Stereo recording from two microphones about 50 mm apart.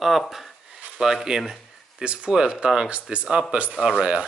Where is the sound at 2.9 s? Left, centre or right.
Right.